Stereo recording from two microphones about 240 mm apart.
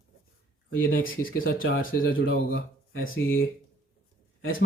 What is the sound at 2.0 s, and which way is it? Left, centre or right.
Speech, left.